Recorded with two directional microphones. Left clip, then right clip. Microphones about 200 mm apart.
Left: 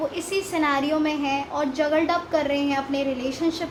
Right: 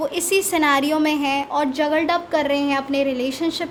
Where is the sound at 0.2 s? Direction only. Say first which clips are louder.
Right 9 dB; 55° right (ahead or behind).